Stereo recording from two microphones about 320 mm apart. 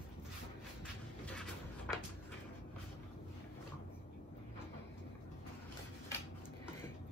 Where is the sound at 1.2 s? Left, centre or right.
Centre.